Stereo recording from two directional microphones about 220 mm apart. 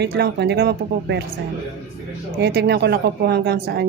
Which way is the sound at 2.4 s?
50° right (ahead or behind).